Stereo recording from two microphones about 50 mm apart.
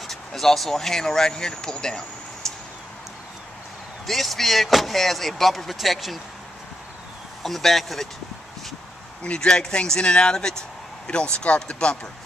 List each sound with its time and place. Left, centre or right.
0.0 s speech: centre
4.0 s speech: centre
7.4 s speech: centre
9.2 s speech: centre